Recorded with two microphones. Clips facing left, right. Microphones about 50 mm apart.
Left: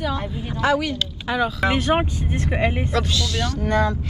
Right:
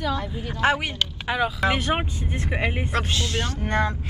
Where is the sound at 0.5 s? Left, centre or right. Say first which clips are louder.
Left 2 dB; right.